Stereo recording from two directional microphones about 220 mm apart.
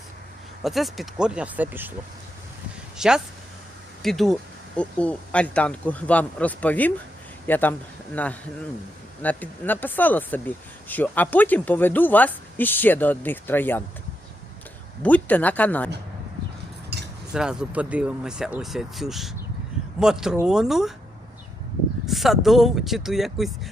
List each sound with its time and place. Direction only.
0.6 s speech: centre (ahead or behind)
3.0 s speech: centre (ahead or behind)
15.0 s speech: 5° left (ahead or behind)
16.9 s cutlery: 45° right (ahead or behind)
17.3 s speech: 5° right (ahead or behind)
22.0 s speech: centre (ahead or behind)